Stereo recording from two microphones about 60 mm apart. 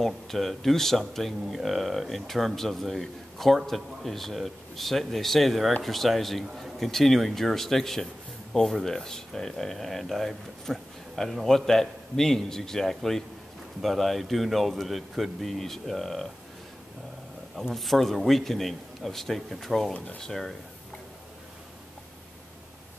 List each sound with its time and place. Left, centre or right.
0.0 s speech: centre
17.7 s speech: centre